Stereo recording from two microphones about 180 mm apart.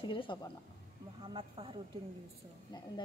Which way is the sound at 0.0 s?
30° left (ahead or behind).